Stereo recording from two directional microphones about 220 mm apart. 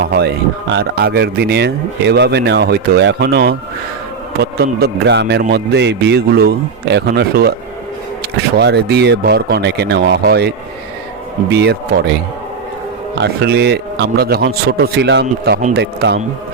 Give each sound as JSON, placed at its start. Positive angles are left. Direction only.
{"t": 0.0, "sound": "speech", "side_deg": -45}
{"t": 8.5, "sound": "speech", "side_deg": -50}
{"t": 13.1, "sound": "speech", "side_deg": -50}